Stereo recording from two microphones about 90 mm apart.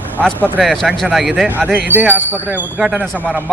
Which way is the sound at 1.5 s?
20° right (ahead or behind).